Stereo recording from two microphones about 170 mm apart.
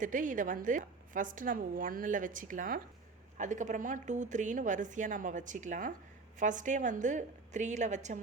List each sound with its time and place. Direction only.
0.0 s a woman's voice: 50° right (ahead or behind)